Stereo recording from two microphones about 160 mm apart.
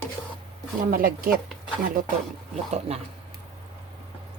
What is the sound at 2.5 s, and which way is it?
Speech, 45° right (ahead or behind).